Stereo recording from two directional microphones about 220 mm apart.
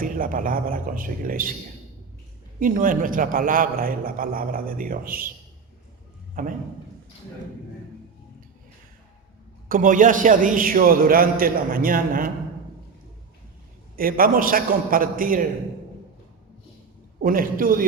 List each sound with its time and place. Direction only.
0.0 s a man's voice: 40° right (ahead or behind)
2.6 s a man's voice: 40° right (ahead or behind)
6.4 s a man's voice: 40° right (ahead or behind)
9.6 s a man's voice: 40° right (ahead or behind)
13.9 s a man's voice: 40° right (ahead or behind)
17.2 s a man's voice: 40° right (ahead or behind)